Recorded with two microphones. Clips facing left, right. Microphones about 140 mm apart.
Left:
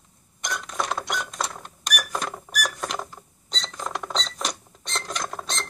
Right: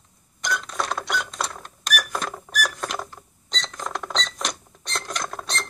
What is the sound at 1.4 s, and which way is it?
Cash register, centre (ahead or behind).